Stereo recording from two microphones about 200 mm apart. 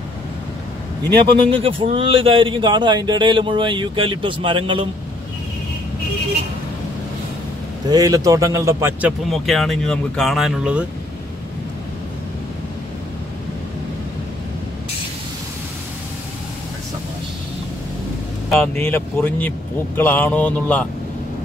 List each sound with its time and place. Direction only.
1.3 s a man's voice: 25° right (ahead or behind)
7.9 s a man's voice: 20° right (ahead or behind)
9.3 s speech: centre (ahead or behind)
18.8 s speech: 10° left (ahead or behind)